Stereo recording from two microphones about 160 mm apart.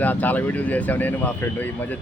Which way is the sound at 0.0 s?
10° left (ahead or behind).